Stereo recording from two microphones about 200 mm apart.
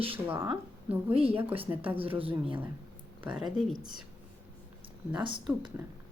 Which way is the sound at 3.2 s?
5° right (ahead or behind).